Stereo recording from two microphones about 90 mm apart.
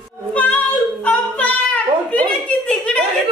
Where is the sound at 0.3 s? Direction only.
15° left (ahead or behind).